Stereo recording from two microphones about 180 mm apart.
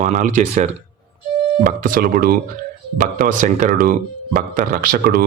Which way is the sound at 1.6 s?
50° right (ahead or behind).